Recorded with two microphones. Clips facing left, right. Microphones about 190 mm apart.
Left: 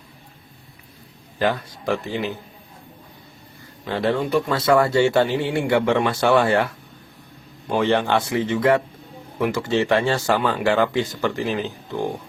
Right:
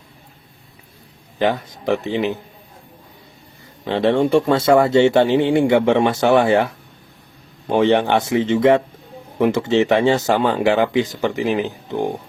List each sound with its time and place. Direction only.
1.4 s speech: 20° right (ahead or behind)
3.8 s speech: 25° right (ahead or behind)